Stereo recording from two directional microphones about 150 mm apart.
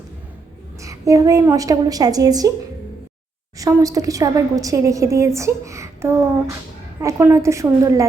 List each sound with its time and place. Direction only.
0.8 s a woman's voice: 20° right (ahead or behind)
3.6 s a woman's voice: 20° right (ahead or behind)